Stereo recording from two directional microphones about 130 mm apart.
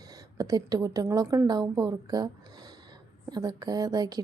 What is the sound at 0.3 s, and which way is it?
Speech, 25° right (ahead or behind).